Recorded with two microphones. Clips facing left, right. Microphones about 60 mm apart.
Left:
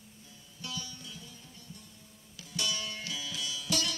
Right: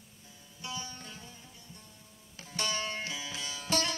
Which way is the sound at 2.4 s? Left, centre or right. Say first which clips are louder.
Right 2 dB; right.